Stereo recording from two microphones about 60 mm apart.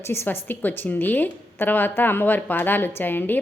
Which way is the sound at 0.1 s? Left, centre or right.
Left.